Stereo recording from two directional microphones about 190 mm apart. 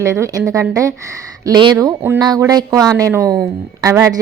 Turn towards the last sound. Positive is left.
turn(degrees=-15)  # may be behind; listen again after turning